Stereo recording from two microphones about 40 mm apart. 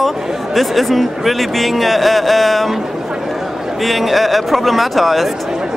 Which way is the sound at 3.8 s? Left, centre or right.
Centre.